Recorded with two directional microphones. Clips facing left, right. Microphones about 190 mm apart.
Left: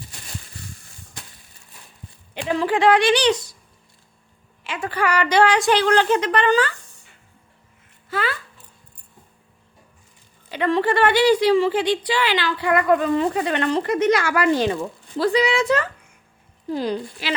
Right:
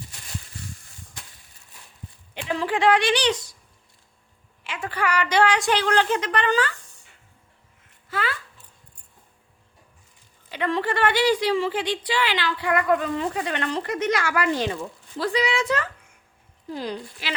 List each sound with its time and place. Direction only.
2.6 s a woman's voice: 40° left (ahead or behind)
4.6 s a woman's voice: 35° left (ahead or behind)
8.1 s a sound: 30° left (ahead or behind)
10.5 s a woman's voice: 35° left (ahead or behind)